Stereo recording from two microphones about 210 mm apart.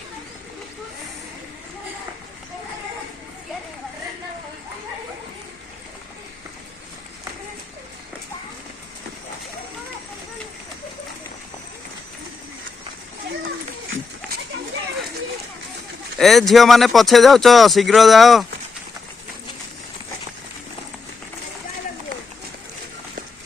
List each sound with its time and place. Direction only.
16.1 s speech: centre (ahead or behind)